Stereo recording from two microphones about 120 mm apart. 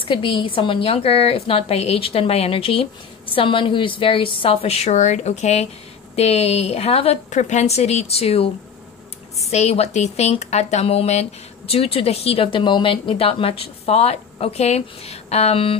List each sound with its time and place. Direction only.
0.0 s a woman's voice: 50° left (ahead or behind); by 5.7 s 70° left (ahead or behind)
6.1 s speech: 60° left (ahead or behind)
7.2 s speech: 85° left; by 8.5 s 55° left (ahead or behind)
9.5 s speech: 65° left (ahead or behind)